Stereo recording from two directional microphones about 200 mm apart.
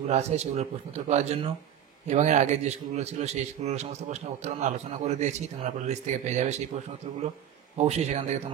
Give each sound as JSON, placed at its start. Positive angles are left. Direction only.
{"t": 0.1, "sound": "a man's voice", "side_deg": -35}
{"t": 7.7, "sound": "a man's voice", "side_deg": -35}